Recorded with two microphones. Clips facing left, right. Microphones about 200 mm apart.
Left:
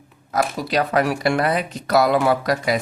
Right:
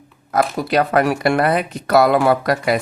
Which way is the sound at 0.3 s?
55° right (ahead or behind).